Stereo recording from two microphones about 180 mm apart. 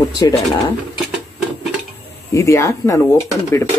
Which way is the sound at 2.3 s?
15° left (ahead or behind).